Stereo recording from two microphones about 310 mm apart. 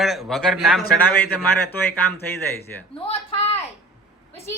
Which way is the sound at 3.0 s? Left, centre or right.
Centre.